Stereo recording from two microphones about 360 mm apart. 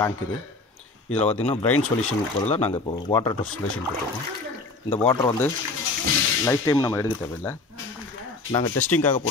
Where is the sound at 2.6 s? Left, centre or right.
Centre.